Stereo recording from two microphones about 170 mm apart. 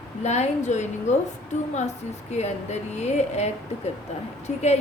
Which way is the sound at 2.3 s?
40° left (ahead or behind).